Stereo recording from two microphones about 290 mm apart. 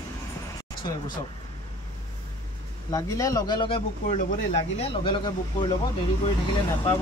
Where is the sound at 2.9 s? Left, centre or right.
Centre.